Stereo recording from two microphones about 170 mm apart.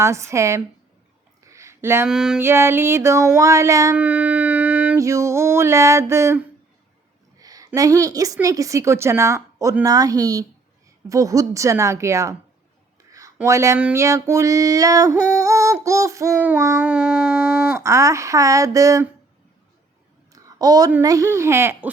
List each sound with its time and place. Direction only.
0.0 s female singing: 15° right (ahead or behind)
1.5 s a sound: 15° right (ahead or behind)
2.0 s music: 5° right (ahead or behind)
2.4 s female singing: 15° right (ahead or behind)
3.9 s howl: 10° right (ahead or behind)
4.9 s female singing: 20° right (ahead or behind)
7.3 s a woman's voice: 20° right (ahead or behind)
11.1 s female singing: 20° right (ahead or behind)
13.1 s a woman's voice: 20° right (ahead or behind)
15.1 s female singing: 20° right (ahead or behind)
17.8 s a woman's voice: 15° right (ahead or behind)
20.3 s a sound: 20° right (ahead or behind)
21.0 s female singing: 20° right (ahead or behind)